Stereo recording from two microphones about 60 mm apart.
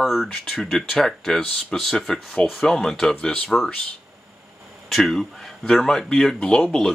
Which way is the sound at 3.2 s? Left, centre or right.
Left.